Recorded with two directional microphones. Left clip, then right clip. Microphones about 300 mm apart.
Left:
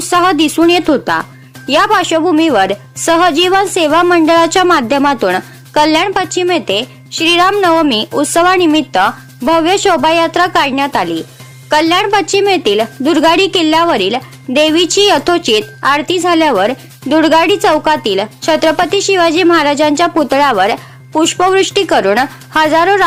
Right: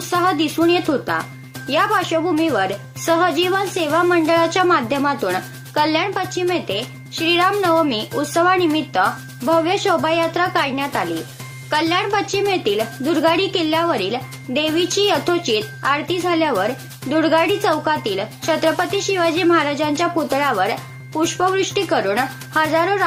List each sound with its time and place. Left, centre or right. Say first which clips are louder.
0.1 s a woman's voice: left 8 dB; left